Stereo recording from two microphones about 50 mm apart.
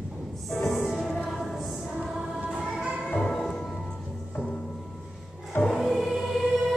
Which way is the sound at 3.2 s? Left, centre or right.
Centre.